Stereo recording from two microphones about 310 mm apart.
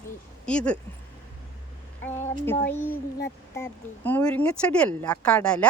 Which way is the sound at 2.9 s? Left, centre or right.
Left.